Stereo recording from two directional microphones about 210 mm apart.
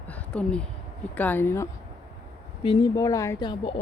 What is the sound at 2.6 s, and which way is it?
Speech, 20° left (ahead or behind).